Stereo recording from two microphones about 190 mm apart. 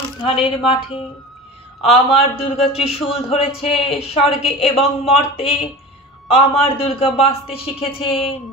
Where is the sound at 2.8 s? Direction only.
30° left (ahead or behind).